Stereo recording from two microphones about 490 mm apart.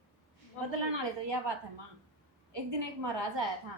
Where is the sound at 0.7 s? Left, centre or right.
Right.